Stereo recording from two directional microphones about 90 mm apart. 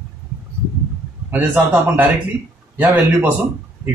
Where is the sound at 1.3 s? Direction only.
20° right (ahead or behind).